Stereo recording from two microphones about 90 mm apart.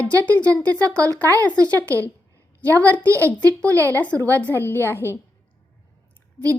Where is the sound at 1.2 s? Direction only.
20° left (ahead or behind).